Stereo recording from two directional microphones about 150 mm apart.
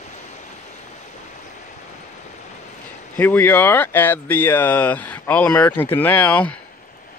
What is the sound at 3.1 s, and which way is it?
Speech, 10° left (ahead or behind).